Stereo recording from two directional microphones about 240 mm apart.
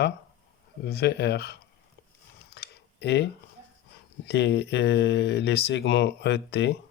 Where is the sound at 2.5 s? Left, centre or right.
Left.